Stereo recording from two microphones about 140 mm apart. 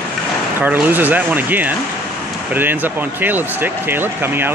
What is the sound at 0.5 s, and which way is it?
Speech, 10° right (ahead or behind).